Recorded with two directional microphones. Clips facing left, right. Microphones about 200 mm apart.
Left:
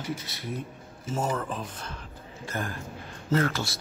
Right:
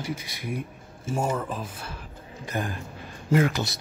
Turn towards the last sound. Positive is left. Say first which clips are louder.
# right 3 dB
turn(degrees=-15)  # may be behind; listen again after turning